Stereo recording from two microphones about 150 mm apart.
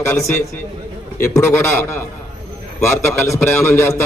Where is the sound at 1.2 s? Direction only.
15° left (ahead or behind).